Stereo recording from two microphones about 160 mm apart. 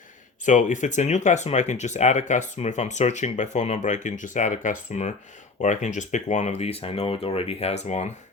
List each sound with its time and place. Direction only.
0.4 s speech: 50° left (ahead or behind)